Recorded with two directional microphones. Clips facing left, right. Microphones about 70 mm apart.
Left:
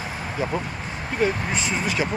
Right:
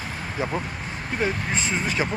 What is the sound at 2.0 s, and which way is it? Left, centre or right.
Speech, right.